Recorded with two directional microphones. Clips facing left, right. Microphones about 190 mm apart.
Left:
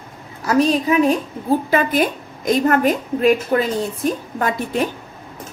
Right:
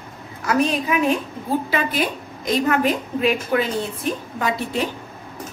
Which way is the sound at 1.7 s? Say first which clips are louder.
Left 5 dB; 50° left (ahead or behind).